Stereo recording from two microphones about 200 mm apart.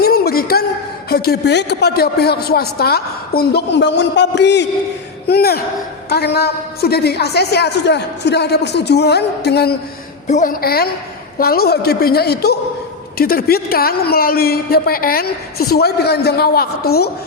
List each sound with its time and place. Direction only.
0.0 s a sound: 50° left (ahead or behind)
1.1 s a man's voice: 50° left (ahead or behind)
10.2 s a man's voice: 40° left (ahead or behind)